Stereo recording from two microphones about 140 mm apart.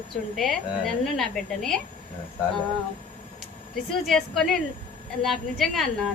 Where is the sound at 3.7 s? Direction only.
Centre (ahead or behind).